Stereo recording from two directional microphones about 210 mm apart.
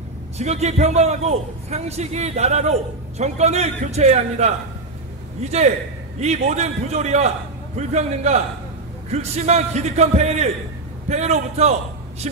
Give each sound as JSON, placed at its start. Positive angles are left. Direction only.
{"t": 0.4, "sound": "a man's voice", "side_deg": -30}